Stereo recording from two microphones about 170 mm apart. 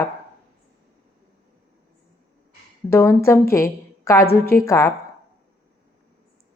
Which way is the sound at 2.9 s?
15° left (ahead or behind).